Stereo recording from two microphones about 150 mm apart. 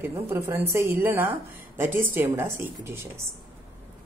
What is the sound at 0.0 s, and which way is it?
Speech, 15° right (ahead or behind).